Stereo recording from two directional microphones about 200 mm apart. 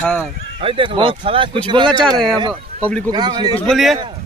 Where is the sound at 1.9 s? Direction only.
Centre (ahead or behind).